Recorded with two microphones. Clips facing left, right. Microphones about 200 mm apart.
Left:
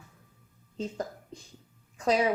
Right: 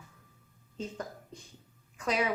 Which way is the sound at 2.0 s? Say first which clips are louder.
Left 5 dB; 30° left (ahead or behind).